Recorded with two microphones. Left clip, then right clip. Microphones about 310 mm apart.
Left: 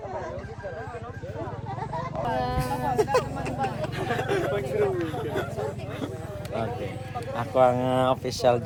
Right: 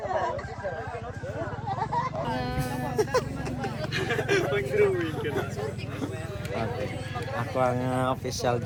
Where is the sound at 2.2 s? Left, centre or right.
Left.